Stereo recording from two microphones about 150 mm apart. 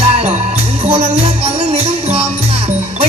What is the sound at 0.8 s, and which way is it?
Speech, 40° right (ahead or behind).